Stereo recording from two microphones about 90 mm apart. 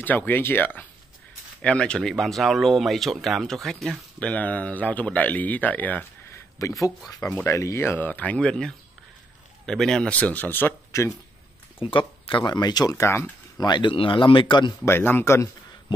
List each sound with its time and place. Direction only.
0.0 s speech: 20° left (ahead or behind)
1.6 s speech: 10° left (ahead or behind)
4.2 s speech: 15° left (ahead or behind)
6.6 s speech: 40° left (ahead or behind)
7.2 s speech: 10° left (ahead or behind)
7.4 s speech: 35° left (ahead or behind)
10.9 s speech: 35° left (ahead or behind)
11.8 s speech: 70° left (ahead or behind); by 12.9 s 50° left (ahead or behind)
12.9 s speech: 30° left (ahead or behind)
13.6 s speech: 55° left (ahead or behind)
14.9 s speech: 25° left (ahead or behind)